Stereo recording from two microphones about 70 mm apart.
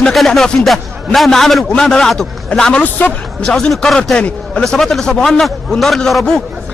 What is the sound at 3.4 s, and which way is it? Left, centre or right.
A man's voice, centre.